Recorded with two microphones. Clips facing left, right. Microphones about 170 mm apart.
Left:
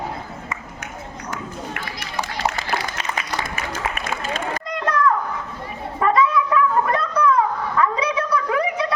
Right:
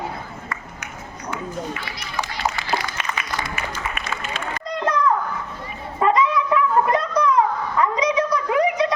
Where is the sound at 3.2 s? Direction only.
40° left (ahead or behind).